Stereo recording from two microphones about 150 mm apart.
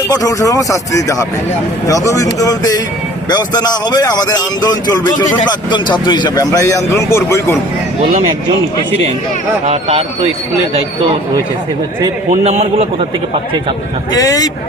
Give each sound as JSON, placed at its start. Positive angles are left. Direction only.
{"t": 0.1, "sound": "a man's voice", "side_deg": 25}
{"t": 9.6, "sound": "a man's voice", "side_deg": -45}
{"t": 12.3, "sound": "a man's voice", "side_deg": -50}
{"t": 14.1, "sound": "a man's voice", "side_deg": 25}